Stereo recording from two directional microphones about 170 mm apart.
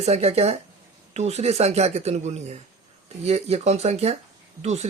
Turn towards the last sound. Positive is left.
turn(degrees=-40)  # may be behind; listen again after turning